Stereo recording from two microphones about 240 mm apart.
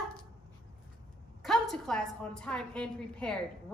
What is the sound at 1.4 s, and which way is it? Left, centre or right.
A woman's voice, centre.